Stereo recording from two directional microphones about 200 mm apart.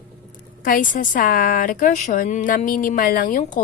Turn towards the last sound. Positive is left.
turn(degrees=40)  # may be behind; listen again after turning